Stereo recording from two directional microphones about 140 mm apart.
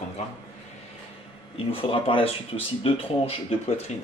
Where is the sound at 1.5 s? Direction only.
40° left (ahead or behind).